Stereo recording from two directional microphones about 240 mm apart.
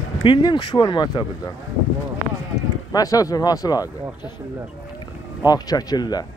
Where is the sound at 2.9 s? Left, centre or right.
Centre.